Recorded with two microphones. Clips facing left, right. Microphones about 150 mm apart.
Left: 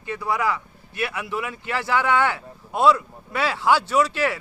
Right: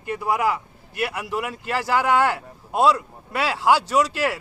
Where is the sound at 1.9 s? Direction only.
5° right (ahead or behind).